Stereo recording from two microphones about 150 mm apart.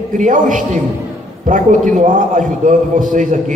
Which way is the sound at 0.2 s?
60° right (ahead or behind).